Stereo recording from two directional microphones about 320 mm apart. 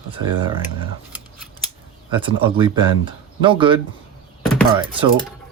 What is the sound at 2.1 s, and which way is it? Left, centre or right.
Speech, centre.